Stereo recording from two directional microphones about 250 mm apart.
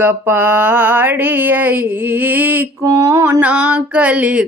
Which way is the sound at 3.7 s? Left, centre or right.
Centre.